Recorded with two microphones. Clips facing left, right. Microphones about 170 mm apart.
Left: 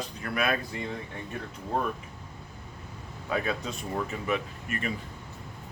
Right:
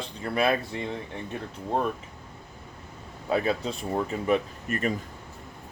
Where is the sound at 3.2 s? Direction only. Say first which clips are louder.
Right 4 dB; 30° right (ahead or behind).